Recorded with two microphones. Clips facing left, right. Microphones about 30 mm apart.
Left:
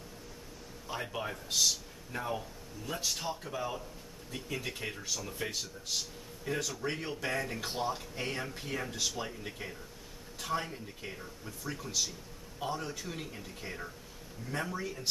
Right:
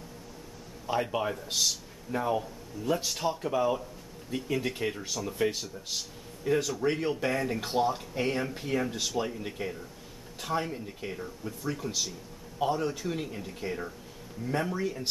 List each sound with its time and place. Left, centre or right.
1.3 s a man's voice: centre